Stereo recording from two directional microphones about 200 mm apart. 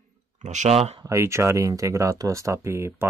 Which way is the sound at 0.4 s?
35° right (ahead or behind).